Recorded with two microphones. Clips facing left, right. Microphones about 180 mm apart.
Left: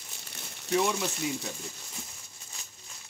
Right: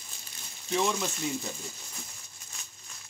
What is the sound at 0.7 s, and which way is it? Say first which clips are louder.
Speech: left 1 dB; 5° left (ahead or behind).